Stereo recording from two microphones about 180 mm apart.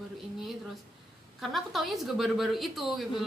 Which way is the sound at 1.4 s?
Centre (ahead or behind).